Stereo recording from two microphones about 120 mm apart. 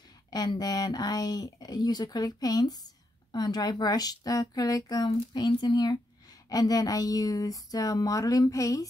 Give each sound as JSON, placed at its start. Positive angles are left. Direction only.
{"t": 0.3, "sound": "speech", "side_deg": 35}